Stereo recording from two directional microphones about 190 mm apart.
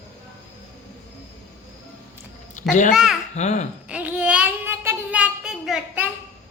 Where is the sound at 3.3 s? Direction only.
35° left (ahead or behind).